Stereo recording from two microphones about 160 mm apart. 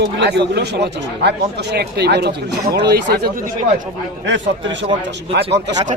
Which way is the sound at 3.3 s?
55° right (ahead or behind).